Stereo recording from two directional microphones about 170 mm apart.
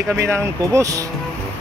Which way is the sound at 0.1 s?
15° right (ahead or behind).